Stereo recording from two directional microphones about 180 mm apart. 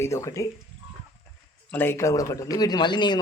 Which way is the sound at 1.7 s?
10° left (ahead or behind).